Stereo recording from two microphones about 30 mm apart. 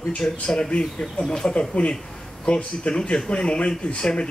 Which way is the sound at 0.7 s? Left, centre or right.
Left.